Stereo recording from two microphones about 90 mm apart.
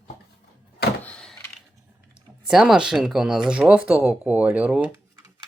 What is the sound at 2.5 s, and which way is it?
Speech, 5° right (ahead or behind).